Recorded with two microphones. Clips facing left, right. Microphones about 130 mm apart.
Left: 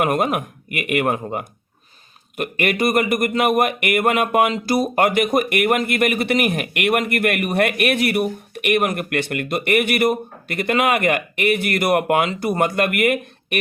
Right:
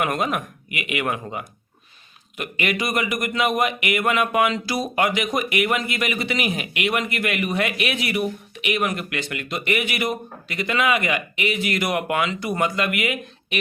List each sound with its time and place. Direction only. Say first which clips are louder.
0.0 s speech: left 4 dB; 50° left (ahead or behind)
2.3 s speech: left 4 dB; 50° left (ahead or behind)